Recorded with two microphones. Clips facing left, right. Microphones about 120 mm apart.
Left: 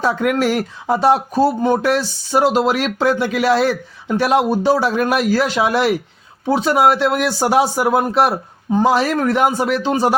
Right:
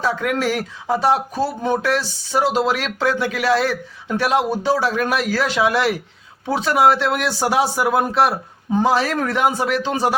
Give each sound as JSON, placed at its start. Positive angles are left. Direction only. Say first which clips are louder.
{"t": 0.0, "sound": "speech", "louder": "left 4 dB", "side_deg": 50}